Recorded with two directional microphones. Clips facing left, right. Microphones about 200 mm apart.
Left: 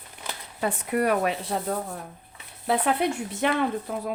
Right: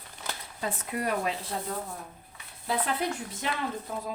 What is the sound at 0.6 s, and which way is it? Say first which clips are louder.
Speech: left 8 dB; 65° left (ahead or behind).